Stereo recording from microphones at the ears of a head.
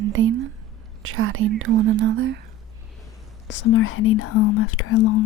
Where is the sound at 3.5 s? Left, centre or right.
Left.